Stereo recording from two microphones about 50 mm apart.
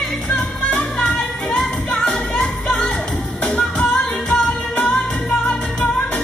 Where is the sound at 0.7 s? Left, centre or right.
Left.